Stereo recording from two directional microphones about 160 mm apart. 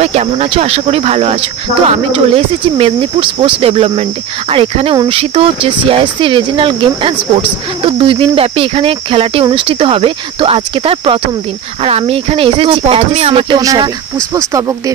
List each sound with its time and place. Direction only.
0.0 s speech: 40° right (ahead or behind)
13.6 s speech: 20° right (ahead or behind)